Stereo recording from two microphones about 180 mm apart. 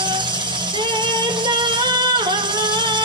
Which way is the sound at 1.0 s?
25° right (ahead or behind).